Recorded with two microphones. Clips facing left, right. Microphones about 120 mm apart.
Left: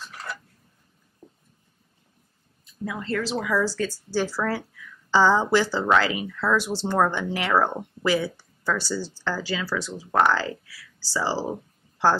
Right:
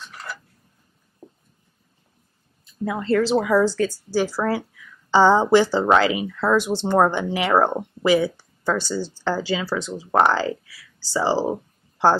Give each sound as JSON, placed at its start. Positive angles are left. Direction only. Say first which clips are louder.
{"t": 0.0, "sound": "a sound", "louder": "even", "side_deg": 0}
{"t": 2.8, "sound": "speech", "louder": "right 8 dB", "side_deg": -40}
{"t": 3.8, "sound": "speech", "louder": "right 4 dB", "side_deg": -15}